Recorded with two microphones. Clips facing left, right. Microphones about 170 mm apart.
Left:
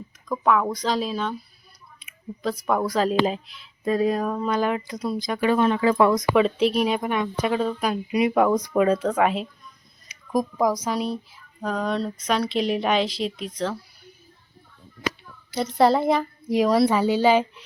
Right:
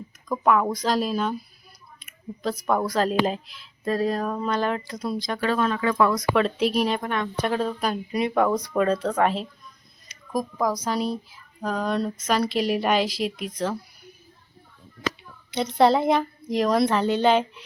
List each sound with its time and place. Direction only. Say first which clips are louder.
0.3 s speech: even; 5° right (ahead or behind)
2.4 s speech: even; centre (ahead or behind); by 6.2 s 20° left (ahead or behind)
6.3 s speech: left 2 dB; 5° left (ahead or behind)
10.1 s a sound: left 4 dB; 20° left (ahead or behind)
11.3 s speech: even; 5° right (ahead or behind)
15.5 s speech: even; centre (ahead or behind)